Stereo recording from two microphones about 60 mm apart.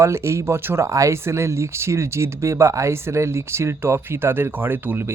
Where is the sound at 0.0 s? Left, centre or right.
Right.